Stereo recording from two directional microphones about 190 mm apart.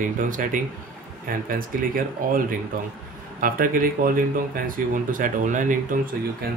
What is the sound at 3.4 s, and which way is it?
Speech, 50° right (ahead or behind).